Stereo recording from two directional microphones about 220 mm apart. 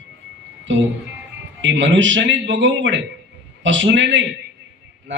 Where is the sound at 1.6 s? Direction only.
55° right (ahead or behind).